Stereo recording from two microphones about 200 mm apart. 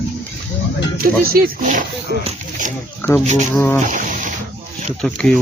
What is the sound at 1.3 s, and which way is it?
Speech, 45° right (ahead or behind).